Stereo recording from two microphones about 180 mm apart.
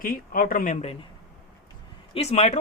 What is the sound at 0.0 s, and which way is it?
Speech, 50° left (ahead or behind).